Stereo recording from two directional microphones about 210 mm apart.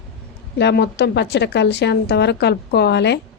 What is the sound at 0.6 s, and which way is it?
Speech, 50° left (ahead or behind).